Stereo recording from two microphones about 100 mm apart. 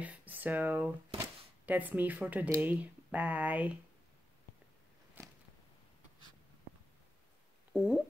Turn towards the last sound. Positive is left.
turn(degrees=-5)  # may be behind; listen again after turning